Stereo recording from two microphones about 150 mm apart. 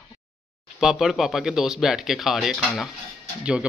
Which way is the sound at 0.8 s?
Centre (ahead or behind).